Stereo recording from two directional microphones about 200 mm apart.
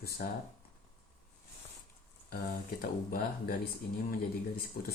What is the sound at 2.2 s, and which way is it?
Speech, 45° left (ahead or behind).